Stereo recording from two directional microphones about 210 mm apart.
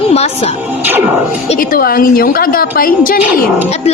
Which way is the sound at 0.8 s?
10° right (ahead or behind).